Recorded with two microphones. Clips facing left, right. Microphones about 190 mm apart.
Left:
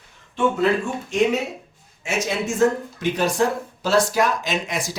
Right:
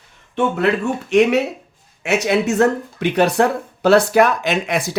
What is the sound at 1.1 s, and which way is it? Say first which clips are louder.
Speech: right 6 dB; 70° right (ahead or behind).